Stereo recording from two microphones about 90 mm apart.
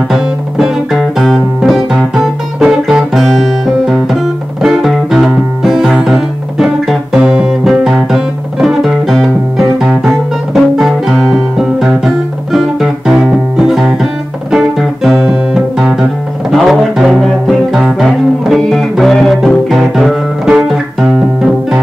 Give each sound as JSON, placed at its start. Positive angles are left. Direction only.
{"t": 0.1, "sound": "music", "side_deg": -5}
{"t": 14.5, "sound": "guitar", "side_deg": -5}
{"t": 17.8, "sound": "music", "side_deg": -5}